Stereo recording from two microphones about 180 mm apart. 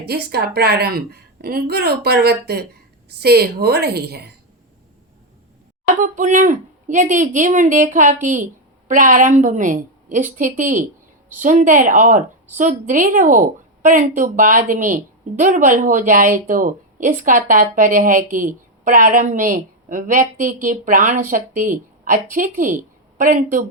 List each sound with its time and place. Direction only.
0.0 s a woman's voice: 65° right (ahead or behind)
6.0 s speech: 45° right (ahead or behind)